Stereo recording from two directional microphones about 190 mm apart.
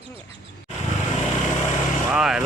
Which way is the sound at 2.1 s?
5° right (ahead or behind).